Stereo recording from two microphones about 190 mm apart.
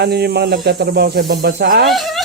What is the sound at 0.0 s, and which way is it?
Speech, 55° right (ahead or behind).